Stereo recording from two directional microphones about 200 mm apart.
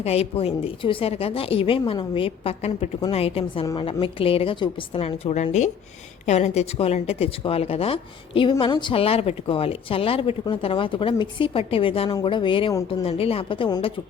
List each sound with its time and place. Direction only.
0.0 s a woman's voice: 30° left (ahead or behind)